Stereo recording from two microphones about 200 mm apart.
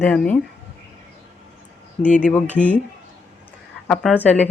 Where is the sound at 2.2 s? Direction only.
5° left (ahead or behind).